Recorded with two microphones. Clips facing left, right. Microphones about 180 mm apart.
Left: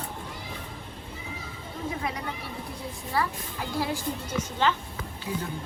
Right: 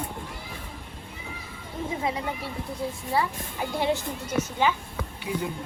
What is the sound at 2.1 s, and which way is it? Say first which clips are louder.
Speech: right 5 dB; 25° right (ahead or behind).